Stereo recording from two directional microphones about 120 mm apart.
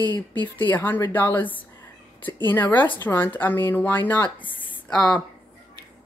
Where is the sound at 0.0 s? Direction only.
15° left (ahead or behind).